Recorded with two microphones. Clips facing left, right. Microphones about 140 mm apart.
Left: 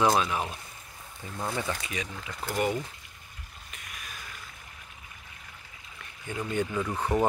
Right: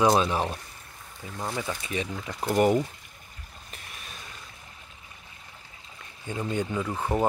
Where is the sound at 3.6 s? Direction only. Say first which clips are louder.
Even; 30° right (ahead or behind).